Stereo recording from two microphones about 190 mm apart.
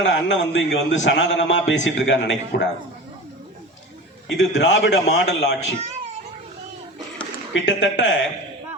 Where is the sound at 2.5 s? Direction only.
55° left (ahead or behind).